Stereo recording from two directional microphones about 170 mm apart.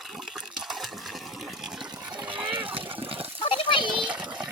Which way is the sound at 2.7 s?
30° right (ahead or behind).